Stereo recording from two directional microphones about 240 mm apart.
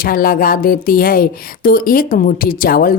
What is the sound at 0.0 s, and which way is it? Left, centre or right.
A woman's voice, left.